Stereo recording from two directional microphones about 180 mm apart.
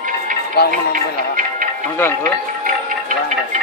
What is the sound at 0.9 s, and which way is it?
Music, 50° right (ahead or behind).